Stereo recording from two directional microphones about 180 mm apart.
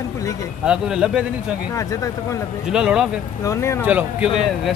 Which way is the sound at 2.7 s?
5° right (ahead or behind).